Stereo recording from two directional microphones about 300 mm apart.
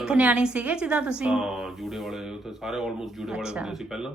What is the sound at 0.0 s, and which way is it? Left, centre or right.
Speech, centre.